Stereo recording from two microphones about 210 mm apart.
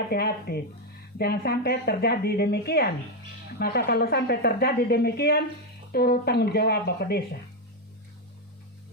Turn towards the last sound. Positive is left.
turn(degrees=50)  # may be behind; listen again after turning